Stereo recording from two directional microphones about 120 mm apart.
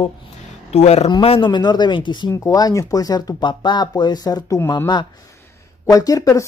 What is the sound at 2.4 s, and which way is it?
Speech, 30° left (ahead or behind).